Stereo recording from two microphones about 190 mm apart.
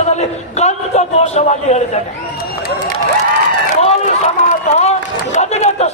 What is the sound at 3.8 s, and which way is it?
Run, 35° left (ahead or behind).